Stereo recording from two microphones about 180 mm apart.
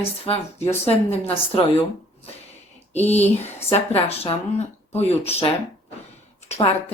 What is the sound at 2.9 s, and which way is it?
A woman's voice, 35° left (ahead or behind).